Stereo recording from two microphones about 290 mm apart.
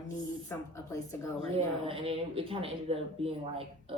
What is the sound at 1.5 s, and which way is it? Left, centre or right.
Speech, centre.